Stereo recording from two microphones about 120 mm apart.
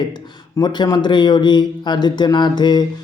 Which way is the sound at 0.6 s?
35° left (ahead or behind).